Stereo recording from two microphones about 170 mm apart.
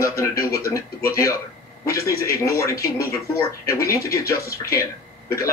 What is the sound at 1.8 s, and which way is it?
Speech, 20° left (ahead or behind).